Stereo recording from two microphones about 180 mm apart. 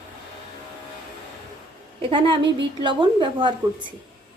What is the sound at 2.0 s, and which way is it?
A woman's voice, 25° right (ahead or behind).